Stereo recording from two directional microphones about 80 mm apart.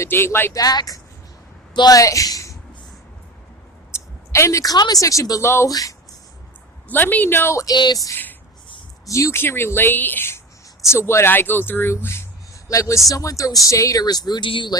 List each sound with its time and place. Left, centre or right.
0.0 s speech: left
0.5 s speech: left
1.7 s a woman's voice: left
2.0 s speech: left
3.9 s a sound: left
4.6 s speech: left
6.8 s speech: left
7.5 s speech: left
8.1 s a sound: left
9.0 s speech: left